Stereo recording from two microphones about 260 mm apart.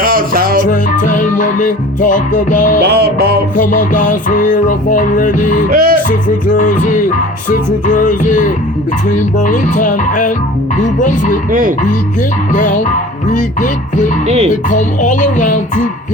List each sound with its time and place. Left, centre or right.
0.0 s music: right
0.6 s music: left
2.8 s music: right
3.6 s music: left
5.7 s music: right
6.1 s music: left
12.5 s music: left